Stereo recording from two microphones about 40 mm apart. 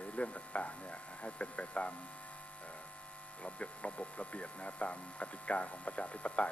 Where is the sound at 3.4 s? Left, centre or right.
Left.